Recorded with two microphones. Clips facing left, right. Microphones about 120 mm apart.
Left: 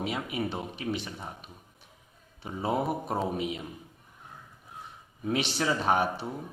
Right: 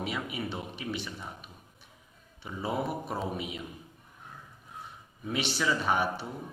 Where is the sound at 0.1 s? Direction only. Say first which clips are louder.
Left 3 dB; 35° left (ahead or behind).